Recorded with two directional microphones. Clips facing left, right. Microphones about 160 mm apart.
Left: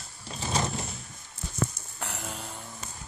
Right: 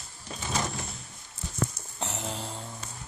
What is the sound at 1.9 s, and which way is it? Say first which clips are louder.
Music: right 3 dB; 25° right (ahead or behind).